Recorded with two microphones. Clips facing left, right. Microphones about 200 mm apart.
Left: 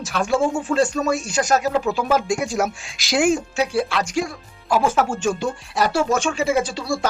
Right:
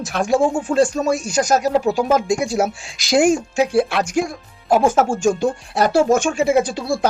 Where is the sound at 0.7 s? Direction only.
30° right (ahead or behind).